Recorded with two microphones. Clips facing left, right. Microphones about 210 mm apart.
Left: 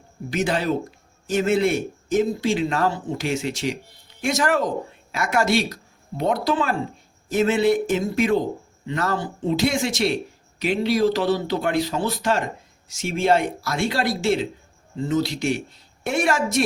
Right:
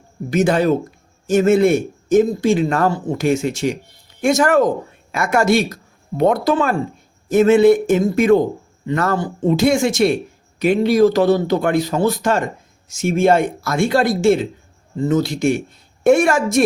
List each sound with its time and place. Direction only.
0.3 s a man's voice: 50° right (ahead or behind)